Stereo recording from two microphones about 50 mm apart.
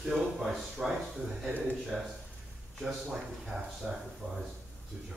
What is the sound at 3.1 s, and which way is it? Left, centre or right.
Speech, centre.